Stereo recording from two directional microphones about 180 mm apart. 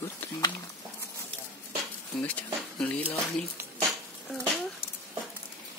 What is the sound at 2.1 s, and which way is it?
Speech, 10° left (ahead or behind).